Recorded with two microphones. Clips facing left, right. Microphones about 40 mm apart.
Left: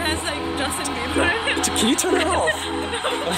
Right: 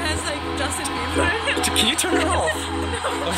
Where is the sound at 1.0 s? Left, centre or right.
Left.